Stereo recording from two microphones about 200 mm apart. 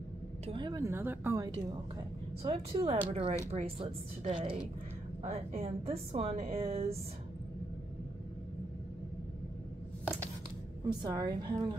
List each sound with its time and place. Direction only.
0.5 s speech: 20° right (ahead or behind)
2.4 s a woman's voice: 30° right (ahead or behind)
10.9 s a woman's voice: 20° right (ahead or behind)